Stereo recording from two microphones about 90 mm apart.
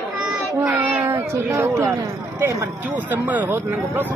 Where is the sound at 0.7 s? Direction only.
25° right (ahead or behind).